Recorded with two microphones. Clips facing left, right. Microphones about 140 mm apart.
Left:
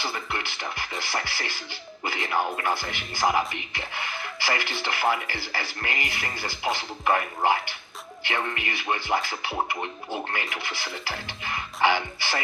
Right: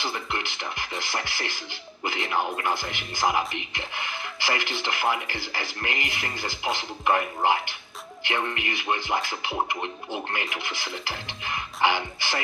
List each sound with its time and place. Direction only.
0.0 s speech: 20° right (ahead or behind)